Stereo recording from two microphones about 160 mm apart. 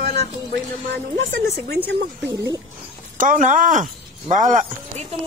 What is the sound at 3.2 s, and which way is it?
A woman's voice, 55° right (ahead or behind).